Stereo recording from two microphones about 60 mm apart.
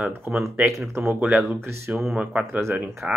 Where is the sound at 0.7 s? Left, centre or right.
Right.